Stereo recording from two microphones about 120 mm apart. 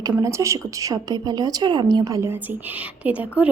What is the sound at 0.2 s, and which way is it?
A woman's voice, 25° right (ahead or behind).